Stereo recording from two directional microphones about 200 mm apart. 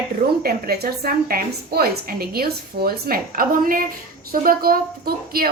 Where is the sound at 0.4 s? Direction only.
50° right (ahead or behind).